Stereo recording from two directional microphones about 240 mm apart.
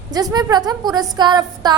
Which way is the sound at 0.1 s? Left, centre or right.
Centre.